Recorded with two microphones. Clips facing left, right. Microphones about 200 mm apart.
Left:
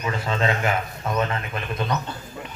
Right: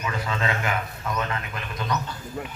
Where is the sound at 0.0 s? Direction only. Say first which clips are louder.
Left 4 dB; 30° left (ahead or behind).